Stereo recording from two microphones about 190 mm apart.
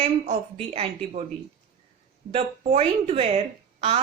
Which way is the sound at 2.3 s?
30° right (ahead or behind).